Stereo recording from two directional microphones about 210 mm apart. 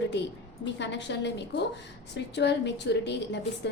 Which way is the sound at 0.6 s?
55° left (ahead or behind).